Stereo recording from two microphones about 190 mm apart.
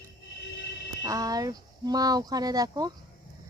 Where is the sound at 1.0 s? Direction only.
20° right (ahead or behind).